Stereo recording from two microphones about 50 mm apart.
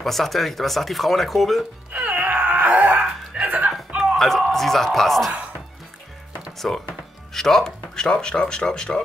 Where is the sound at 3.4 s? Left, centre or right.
Right.